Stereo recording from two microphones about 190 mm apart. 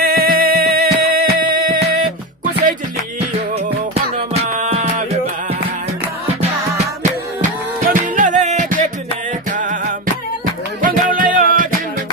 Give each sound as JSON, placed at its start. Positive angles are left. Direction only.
{"t": 0.0, "sound": "music", "side_deg": -55}
{"t": 4.5, "sound": "music", "side_deg": -40}
{"t": 7.9, "sound": "music", "side_deg": -45}
{"t": 10.8, "sound": "music", "side_deg": -45}